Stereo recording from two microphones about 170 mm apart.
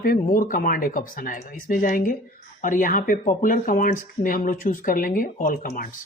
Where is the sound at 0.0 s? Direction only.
55° left (ahead or behind).